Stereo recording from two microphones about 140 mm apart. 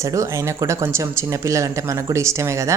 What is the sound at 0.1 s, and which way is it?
Speech, 25° right (ahead or behind).